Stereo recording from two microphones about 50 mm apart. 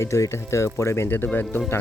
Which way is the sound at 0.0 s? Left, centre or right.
Left.